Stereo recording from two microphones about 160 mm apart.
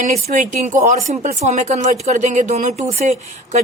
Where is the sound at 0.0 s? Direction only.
55° right (ahead or behind).